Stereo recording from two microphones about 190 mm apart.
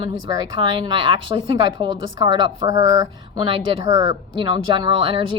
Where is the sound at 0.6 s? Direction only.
25° right (ahead or behind).